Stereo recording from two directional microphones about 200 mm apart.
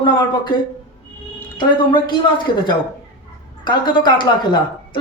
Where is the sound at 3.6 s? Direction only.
20° left (ahead or behind).